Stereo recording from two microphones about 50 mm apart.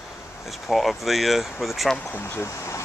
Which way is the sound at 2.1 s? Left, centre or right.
Left.